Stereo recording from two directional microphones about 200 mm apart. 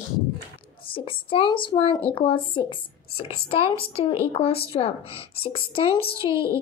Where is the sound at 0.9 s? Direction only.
25° left (ahead or behind).